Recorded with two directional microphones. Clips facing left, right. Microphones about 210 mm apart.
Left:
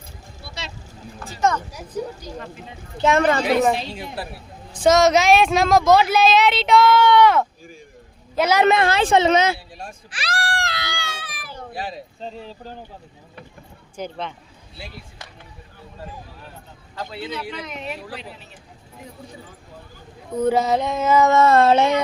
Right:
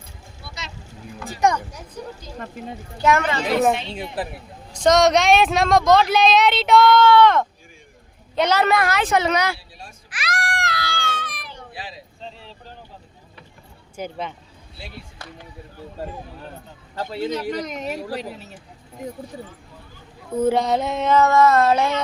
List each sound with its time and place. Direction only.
1.2 s speech: 15° right (ahead or behind)
3.0 s a woman's voice: 25° left (ahead or behind)
3.9 s speech: 15° right (ahead or behind)
4.7 s speech: 5° left (ahead or behind)
7.0 s a woman's voice: 15° left (ahead or behind)
8.6 s a woman's voice: 25° left (ahead or behind)
10.1 s baby cry: 30° left (ahead or behind)
11.0 s a sound: 5° left (ahead or behind)
11.7 s speech: 45° left (ahead or behind)
13.9 s speech: 10° right (ahead or behind)
16.9 s speech: 40° right (ahead or behind)
20.3 s speech: 5° right (ahead or behind)
21.2 s a woman's voice: 25° left (ahead or behind)